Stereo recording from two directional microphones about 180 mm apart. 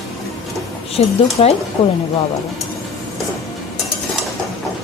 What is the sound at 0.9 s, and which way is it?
Speech, 35° left (ahead or behind).